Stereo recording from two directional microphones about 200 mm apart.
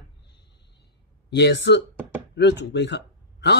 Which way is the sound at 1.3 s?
60° left (ahead or behind).